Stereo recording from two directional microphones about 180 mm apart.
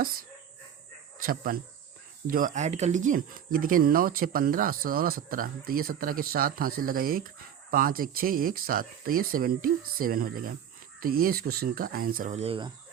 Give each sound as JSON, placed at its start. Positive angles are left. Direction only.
{"t": 1.2, "sound": "speech", "side_deg": -50}